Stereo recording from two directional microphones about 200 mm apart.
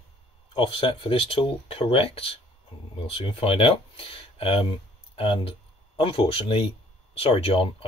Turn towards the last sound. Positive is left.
turn(degrees=25)  # may be behind; listen again after turning